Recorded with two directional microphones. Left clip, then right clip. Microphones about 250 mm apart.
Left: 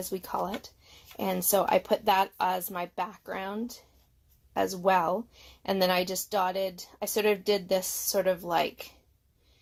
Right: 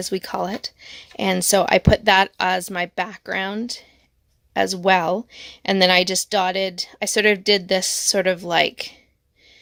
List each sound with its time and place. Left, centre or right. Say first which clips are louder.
0.0 s speech: right 8 dB; right